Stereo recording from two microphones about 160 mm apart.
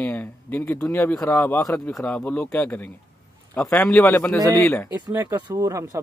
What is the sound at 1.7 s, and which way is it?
Speech, 5° left (ahead or behind).